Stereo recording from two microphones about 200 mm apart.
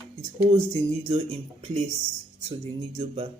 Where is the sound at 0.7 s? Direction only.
30° right (ahead or behind).